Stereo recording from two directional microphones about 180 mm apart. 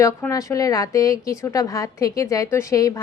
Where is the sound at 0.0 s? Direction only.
15° left (ahead or behind).